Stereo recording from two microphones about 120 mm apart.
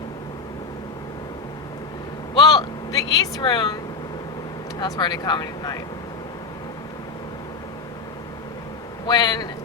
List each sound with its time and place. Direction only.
2.3 s vehicle: 35° left (ahead or behind)
4.8 s speech: 40° left (ahead or behind)
9.0 s speech: 40° left (ahead or behind)